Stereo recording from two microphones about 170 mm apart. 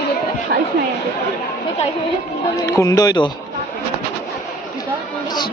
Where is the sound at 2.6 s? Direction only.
20° left (ahead or behind).